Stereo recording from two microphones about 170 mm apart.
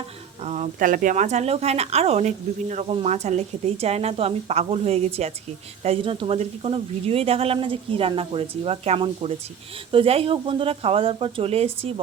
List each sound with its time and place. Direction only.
0.4 s speech: 45° right (ahead or behind)